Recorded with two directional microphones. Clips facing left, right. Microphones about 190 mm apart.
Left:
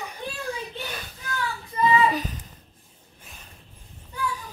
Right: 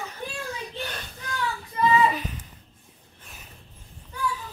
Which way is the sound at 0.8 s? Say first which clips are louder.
Even; 5° left (ahead or behind).